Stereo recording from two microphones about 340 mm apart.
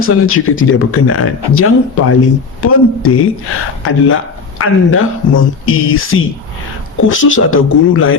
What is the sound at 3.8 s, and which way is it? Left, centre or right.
Speech, left.